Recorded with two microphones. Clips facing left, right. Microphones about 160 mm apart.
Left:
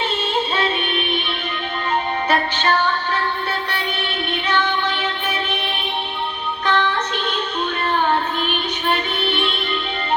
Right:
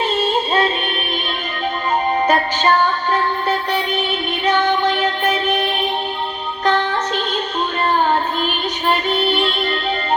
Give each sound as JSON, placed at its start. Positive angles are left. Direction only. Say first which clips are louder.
{"t": 0.2, "sound": "music", "louder": "right 4 dB", "side_deg": -40}
{"t": 2.2, "sound": "music", "louder": "right 3 dB", "side_deg": -45}
{"t": 6.7, "sound": "music", "louder": "right 2 dB", "side_deg": -45}
{"t": 8.9, "sound": "music", "louder": "right 5 dB", "side_deg": -45}